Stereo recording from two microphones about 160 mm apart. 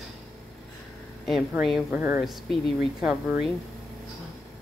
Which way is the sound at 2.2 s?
Centre (ahead or behind).